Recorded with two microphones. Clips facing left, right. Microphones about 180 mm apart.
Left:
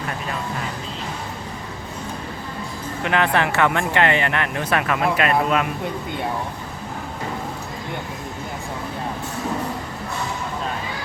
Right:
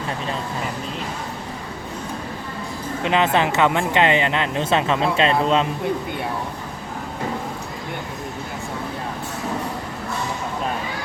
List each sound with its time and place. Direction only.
3.0 s speech: 20° right (ahead or behind)